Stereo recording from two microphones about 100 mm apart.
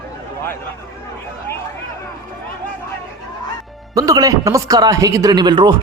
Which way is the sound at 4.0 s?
35° right (ahead or behind).